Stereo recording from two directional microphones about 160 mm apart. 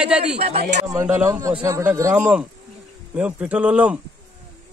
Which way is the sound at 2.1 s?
5° right (ahead or behind).